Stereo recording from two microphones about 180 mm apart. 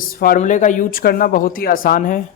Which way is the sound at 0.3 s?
45° left (ahead or behind).